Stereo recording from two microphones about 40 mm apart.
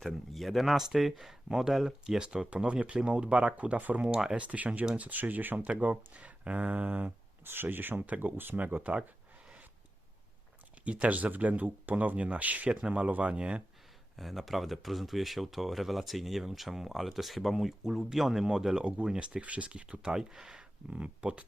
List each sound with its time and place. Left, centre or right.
0.0 s speech: centre
2.5 s speech: right
3.5 s speech: right
5.6 s speech: right
6.1 s a sound: right
7.4 s speech: right
8.0 s speech: right
11.0 s speech: right
14.2 s speech: centre
18.8 s speech: right
19.4 s speech: right; by 20.7 s centre
20.9 s speech: right